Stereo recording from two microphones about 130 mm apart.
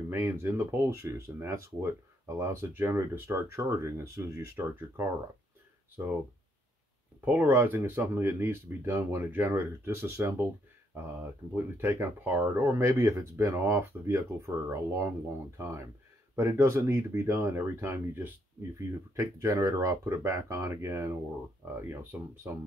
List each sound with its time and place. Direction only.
0.1 s speech: 20° right (ahead or behind)
7.2 s speech: 15° right (ahead or behind)
11.5 s speech: 20° right (ahead or behind)